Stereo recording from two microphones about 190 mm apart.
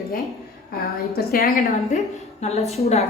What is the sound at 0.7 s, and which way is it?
Speech, 55° left (ahead or behind).